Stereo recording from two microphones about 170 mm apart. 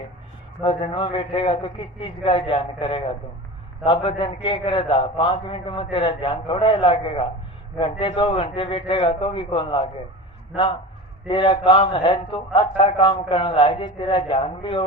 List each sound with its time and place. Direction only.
0.6 s a man's voice: 30° left (ahead or behind)
11.3 s a man's voice: 30° left (ahead or behind)